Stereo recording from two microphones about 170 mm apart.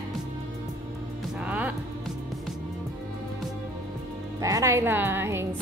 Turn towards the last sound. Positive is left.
turn(degrees=-15)  # may be behind; listen again after turning